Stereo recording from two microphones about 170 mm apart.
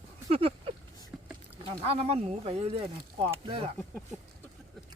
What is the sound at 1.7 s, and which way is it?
Speech, 35° right (ahead or behind).